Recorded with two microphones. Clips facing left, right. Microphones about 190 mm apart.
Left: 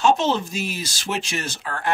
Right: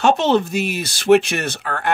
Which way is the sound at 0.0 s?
65° right (ahead or behind).